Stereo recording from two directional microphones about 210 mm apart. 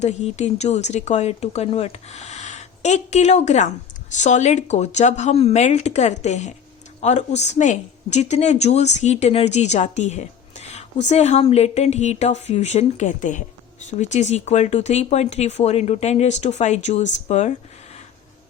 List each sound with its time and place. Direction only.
0.0 s speech: 30° left (ahead or behind)